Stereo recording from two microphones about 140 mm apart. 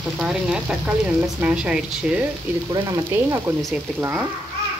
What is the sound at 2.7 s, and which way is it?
Frying, 25° right (ahead or behind).